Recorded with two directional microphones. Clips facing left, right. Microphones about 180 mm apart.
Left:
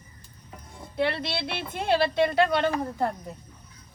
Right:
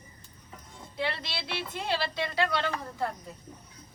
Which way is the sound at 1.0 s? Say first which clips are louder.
Left 7 dB; 55° left (ahead or behind).